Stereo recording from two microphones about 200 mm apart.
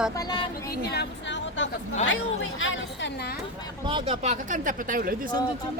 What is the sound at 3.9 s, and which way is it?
Speech, 25° right (ahead or behind).